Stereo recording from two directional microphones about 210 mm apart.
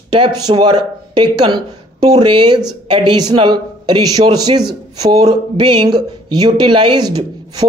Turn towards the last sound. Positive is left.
turn(degrees=-20)  # may be behind; listen again after turning